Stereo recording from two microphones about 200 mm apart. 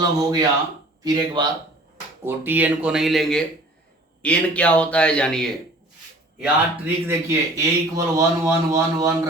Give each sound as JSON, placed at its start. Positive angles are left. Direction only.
{"t": 0.2, "sound": "speech", "side_deg": -20}
{"t": 2.2, "sound": "speech", "side_deg": -10}
{"t": 6.4, "sound": "a man's voice", "side_deg": -10}